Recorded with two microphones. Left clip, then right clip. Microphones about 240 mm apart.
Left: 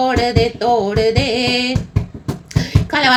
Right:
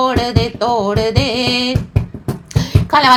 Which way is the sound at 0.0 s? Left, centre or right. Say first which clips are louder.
Left 1 dB; centre.